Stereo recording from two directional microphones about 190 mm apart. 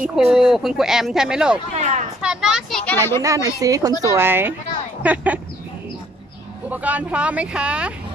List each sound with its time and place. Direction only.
0.0 s speech: centre (ahead or behind)
1.8 s speech: 35° right (ahead or behind)
2.2 s speech: 5° right (ahead or behind)
3.2 s speech: 15° right (ahead or behind)
6.7 s speech: 10° right (ahead or behind)